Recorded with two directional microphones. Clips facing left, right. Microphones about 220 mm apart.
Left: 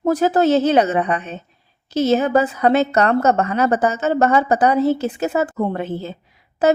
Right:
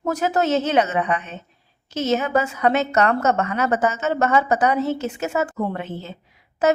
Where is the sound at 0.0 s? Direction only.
35° left (ahead or behind).